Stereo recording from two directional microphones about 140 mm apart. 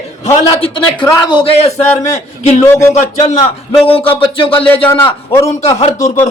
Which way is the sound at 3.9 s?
40° left (ahead or behind).